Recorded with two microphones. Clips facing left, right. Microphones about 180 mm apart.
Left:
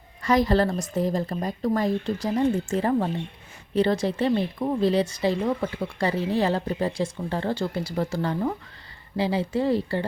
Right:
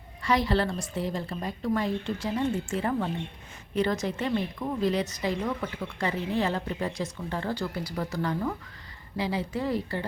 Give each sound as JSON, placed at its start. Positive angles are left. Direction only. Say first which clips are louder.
{"t": 0.2, "sound": "a woman's voice", "louder": "left 5 dB", "side_deg": 45}